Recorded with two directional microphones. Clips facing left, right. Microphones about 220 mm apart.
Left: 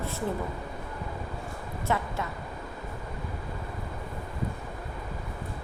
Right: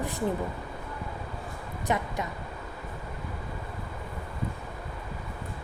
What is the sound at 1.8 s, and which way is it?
Speech, 15° right (ahead or behind).